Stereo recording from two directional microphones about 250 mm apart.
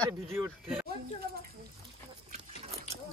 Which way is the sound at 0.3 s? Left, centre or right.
Centre.